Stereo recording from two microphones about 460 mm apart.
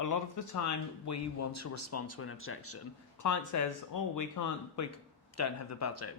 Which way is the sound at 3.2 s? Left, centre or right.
Left.